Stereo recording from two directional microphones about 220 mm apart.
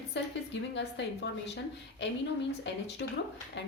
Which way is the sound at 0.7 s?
55° left (ahead or behind).